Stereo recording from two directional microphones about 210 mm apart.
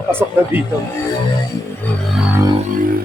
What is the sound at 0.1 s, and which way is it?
Speech, 10° right (ahead or behind).